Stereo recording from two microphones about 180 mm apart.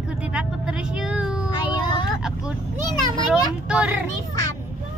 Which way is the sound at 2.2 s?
5° right (ahead or behind).